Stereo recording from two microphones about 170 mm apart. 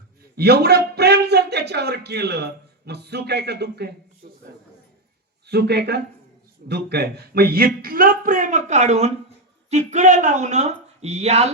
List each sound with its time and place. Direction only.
0.3 s speech: 70° right (ahead or behind)
4.2 s a sound: 50° right (ahead or behind)
5.5 s speech: 80° right; by 11.5 s 40° right (ahead or behind)